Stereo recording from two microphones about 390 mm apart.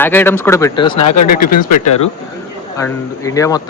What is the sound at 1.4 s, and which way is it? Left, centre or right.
Speech, left.